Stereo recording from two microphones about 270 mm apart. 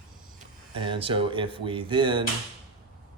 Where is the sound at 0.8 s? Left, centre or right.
Centre.